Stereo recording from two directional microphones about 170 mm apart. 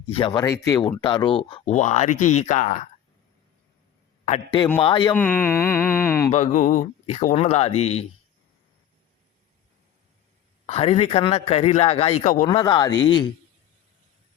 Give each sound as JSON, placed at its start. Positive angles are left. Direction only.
{"t": 0.1, "sound": "speech", "side_deg": 30}
{"t": 1.6, "sound": "speech", "side_deg": 45}
{"t": 4.3, "sound": "speech", "side_deg": 30}
{"t": 5.1, "sound": "speech", "side_deg": 10}
{"t": 6.3, "sound": "a man's voice", "side_deg": 45}
{"t": 10.7, "sound": "a man's voice", "side_deg": 35}
{"t": 12.2, "sound": "speech", "side_deg": 50}
{"t": 12.5, "sound": "speech", "side_deg": 25}